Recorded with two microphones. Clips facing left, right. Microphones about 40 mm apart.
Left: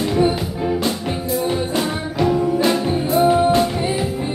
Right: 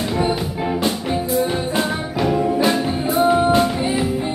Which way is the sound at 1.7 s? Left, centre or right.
Centre.